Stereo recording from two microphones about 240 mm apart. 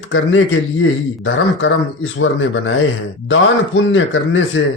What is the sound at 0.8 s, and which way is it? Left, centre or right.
Speech, left.